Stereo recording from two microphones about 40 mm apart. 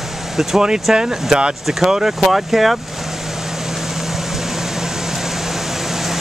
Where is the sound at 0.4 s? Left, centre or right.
Centre.